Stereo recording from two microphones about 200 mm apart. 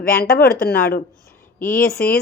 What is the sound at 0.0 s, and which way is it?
A woman's voice, 45° left (ahead or behind).